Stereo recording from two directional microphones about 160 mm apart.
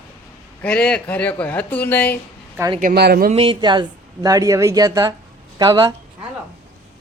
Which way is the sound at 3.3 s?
35° right (ahead or behind).